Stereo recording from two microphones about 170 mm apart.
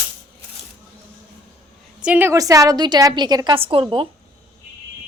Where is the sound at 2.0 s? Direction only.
10° right (ahead or behind); by 3.8 s 30° right (ahead or behind).